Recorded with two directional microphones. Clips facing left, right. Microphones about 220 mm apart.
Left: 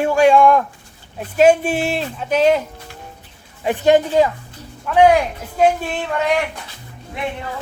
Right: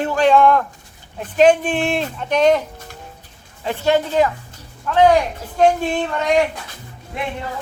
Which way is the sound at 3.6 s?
15° left (ahead or behind).